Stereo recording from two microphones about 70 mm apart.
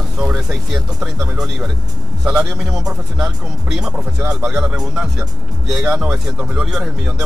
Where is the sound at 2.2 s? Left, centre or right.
Centre.